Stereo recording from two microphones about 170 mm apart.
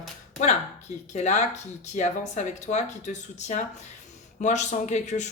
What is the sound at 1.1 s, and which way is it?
A man's voice, 45° left (ahead or behind).